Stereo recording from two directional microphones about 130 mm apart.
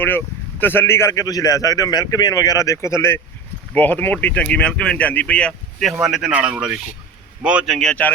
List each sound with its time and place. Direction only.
0.0 s speech: 15° left (ahead or behind)